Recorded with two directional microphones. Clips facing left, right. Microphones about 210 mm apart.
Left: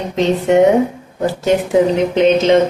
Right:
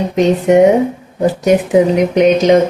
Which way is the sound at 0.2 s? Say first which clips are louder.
Right 3 dB; 15° right (ahead or behind).